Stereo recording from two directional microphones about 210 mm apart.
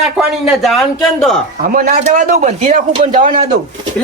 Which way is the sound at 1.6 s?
40° right (ahead or behind).